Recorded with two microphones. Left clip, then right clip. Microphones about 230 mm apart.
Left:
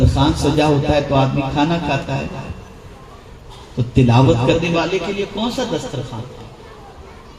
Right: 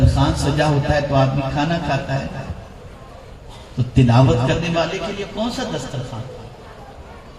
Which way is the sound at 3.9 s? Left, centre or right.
Left.